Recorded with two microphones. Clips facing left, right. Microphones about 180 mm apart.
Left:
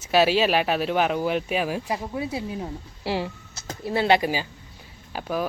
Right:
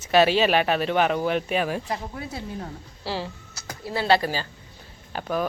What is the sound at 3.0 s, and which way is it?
Speech, 25° left (ahead or behind).